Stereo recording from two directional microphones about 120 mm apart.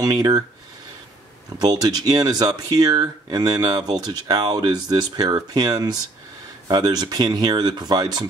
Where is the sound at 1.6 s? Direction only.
35° right (ahead or behind).